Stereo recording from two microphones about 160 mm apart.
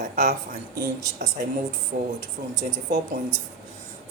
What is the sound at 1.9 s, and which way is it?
Speech, 85° right.